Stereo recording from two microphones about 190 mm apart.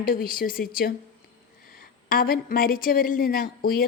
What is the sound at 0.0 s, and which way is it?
A woman's voice, 50° left (ahead or behind).